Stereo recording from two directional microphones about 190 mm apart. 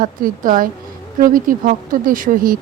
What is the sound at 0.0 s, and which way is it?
Speech, 45° right (ahead or behind).